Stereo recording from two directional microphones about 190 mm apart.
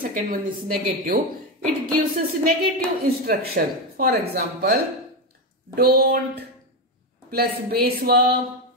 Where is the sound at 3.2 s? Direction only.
50° right (ahead or behind).